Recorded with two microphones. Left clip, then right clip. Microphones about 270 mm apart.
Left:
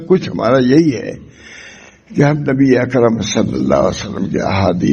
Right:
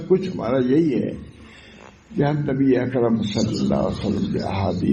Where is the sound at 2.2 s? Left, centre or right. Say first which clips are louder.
Left 8 dB; left.